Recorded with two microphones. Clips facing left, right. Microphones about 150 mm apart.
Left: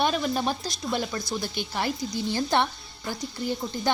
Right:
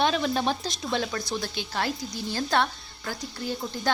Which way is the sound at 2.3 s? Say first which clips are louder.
Even; 15° left (ahead or behind).